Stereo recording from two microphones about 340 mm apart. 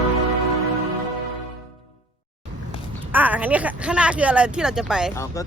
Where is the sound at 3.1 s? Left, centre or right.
Centre.